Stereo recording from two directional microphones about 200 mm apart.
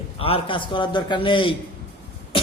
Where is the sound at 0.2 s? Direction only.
30° left (ahead or behind).